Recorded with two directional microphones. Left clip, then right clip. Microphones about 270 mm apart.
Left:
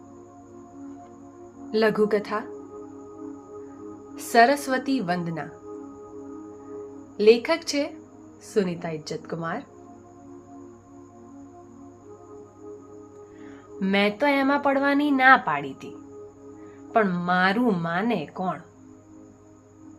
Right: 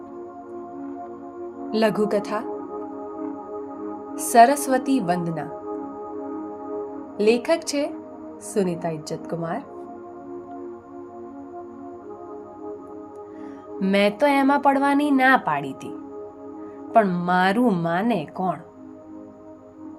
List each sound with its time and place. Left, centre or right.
1.7 s speech: right
4.1 s speech: right
7.2 s speech: right
13.7 s speech: right
16.9 s speech: right